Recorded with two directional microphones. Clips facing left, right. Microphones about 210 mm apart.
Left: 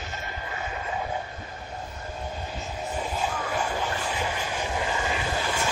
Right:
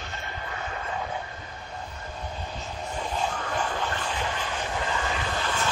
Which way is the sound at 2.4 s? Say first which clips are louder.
Left 2 dB; 10° left (ahead or behind).